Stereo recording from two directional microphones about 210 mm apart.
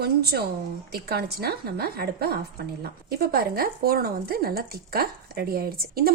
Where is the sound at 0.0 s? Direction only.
50° right (ahead or behind).